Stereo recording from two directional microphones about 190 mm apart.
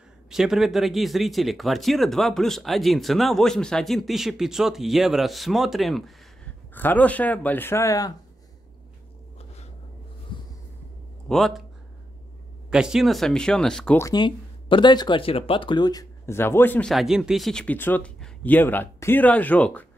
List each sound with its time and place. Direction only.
0.3 s speech: centre (ahead or behind); by 8.1 s 15° left (ahead or behind)
11.2 s speech: centre (ahead or behind)
12.6 s speech: 5° right (ahead or behind)
13.9 s speech: 20° left (ahead or behind)
16.9 s speech: centre (ahead or behind)